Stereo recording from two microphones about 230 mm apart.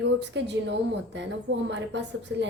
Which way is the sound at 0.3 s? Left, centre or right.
Right.